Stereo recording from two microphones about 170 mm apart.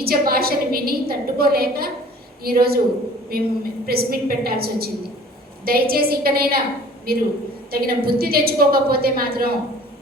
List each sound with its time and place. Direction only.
0.0 s a woman's voice: 60° right (ahead or behind)